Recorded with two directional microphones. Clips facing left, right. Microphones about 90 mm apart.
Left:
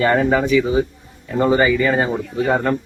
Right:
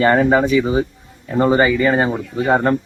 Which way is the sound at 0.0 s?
35° right (ahead or behind).